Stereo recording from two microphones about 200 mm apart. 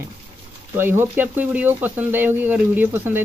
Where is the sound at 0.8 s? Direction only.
10° right (ahead or behind).